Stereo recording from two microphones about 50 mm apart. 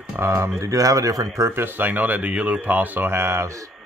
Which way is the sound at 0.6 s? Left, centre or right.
Right.